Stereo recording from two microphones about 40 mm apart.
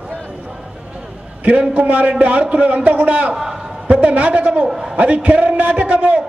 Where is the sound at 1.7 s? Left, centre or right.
Right.